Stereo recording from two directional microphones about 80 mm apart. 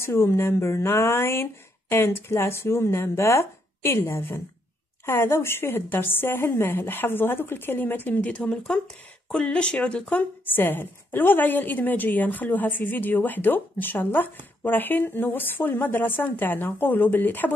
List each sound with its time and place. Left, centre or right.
0.0 s a woman's voice: left